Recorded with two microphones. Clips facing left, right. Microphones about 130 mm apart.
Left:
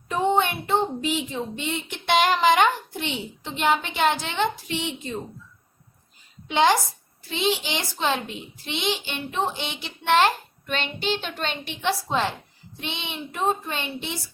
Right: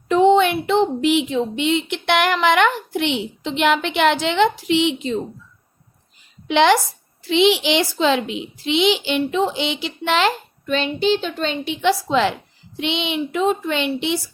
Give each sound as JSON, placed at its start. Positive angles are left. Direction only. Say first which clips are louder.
{"t": 0.1, "sound": "a woman's voice", "louder": "right 8 dB", "side_deg": -90}
{"t": 6.5, "sound": "a woman's voice", "louder": "right 5 dB", "side_deg": -80}
{"t": 7.2, "sound": "a woman's voice", "louder": "right 9 dB", "side_deg": -90}
{"t": 11.7, "sound": "a woman's voice", "louder": "right 7 dB", "side_deg": -90}